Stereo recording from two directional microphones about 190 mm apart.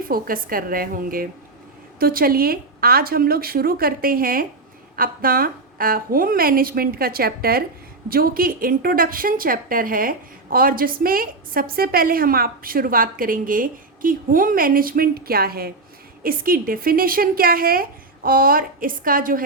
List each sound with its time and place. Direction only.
0.1 s a woman's voice: 50° right (ahead or behind)